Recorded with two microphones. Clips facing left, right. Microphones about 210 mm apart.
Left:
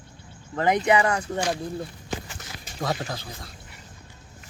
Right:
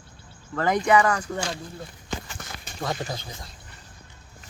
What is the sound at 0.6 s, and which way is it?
Speech, 20° left (ahead or behind).